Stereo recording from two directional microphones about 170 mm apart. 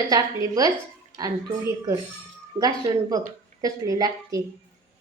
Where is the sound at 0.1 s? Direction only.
20° right (ahead or behind).